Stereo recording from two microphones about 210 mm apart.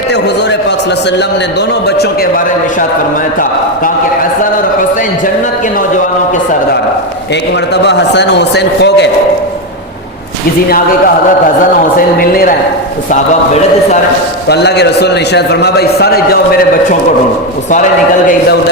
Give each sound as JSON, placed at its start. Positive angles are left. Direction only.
{"t": 7.7, "sound": "a man's voice", "side_deg": 55}
{"t": 11.9, "sound": "a man's voice", "side_deg": 45}
{"t": 14.4, "sound": "a man's voice", "side_deg": 55}